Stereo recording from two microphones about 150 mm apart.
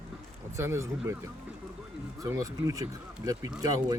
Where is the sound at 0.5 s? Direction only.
20° right (ahead or behind).